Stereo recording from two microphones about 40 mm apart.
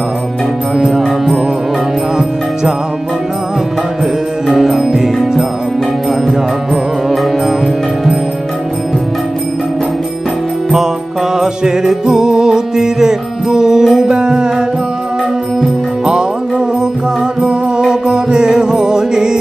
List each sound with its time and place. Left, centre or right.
0.7 s music: centre
4.5 s music: centre
6.2 s music: centre
11.3 s music: centre
16.1 s music: right